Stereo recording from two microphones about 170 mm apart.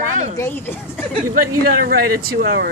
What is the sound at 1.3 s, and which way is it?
Speech, 60° right (ahead or behind).